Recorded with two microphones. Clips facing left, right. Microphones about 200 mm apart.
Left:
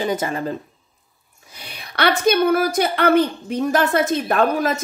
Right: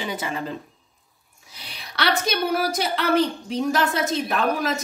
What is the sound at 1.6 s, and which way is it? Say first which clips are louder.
A woman's voice: left 5 dB; 55° left (ahead or behind).